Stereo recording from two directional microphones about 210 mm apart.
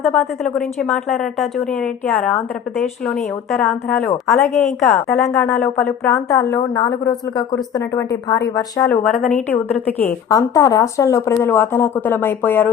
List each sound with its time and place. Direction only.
0.0 s a woman's voice: 5° left (ahead or behind)
3.9 s a woman's voice: 15° left (ahead or behind)
5.0 s a woman's voice: 15° left (ahead or behind)
5.5 s a woman's voice: centre (ahead or behind)
6.1 s a woman's voice: 15° left (ahead or behind)
9.1 s a woman's voice: 5° left (ahead or behind)